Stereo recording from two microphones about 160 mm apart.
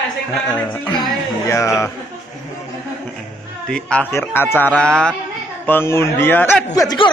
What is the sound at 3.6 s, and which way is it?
Speech, 5° left (ahead or behind).